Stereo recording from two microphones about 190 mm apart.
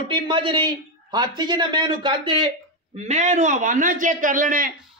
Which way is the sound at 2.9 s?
35° right (ahead or behind).